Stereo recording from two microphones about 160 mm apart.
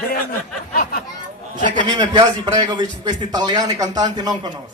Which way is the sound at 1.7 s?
30° right (ahead or behind).